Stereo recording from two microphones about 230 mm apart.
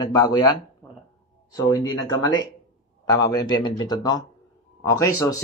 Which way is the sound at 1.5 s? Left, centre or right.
Centre.